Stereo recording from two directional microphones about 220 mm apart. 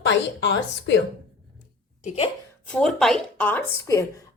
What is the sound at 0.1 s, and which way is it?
Speech, 55° left (ahead or behind).